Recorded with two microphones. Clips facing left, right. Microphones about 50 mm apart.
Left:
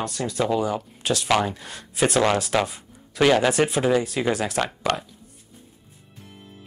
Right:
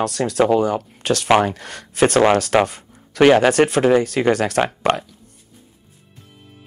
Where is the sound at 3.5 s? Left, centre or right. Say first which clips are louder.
Right 6 dB; right.